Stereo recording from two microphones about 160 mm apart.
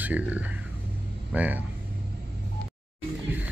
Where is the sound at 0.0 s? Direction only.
10° right (ahead or behind).